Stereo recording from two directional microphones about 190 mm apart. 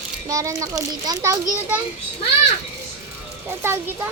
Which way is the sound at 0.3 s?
15° right (ahead or behind).